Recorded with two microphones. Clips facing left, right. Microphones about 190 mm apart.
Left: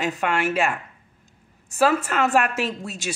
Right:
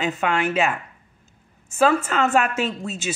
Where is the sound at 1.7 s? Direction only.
Centre (ahead or behind).